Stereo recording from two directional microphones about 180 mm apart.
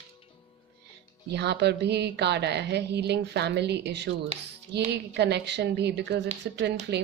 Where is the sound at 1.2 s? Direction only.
70° right (ahead or behind).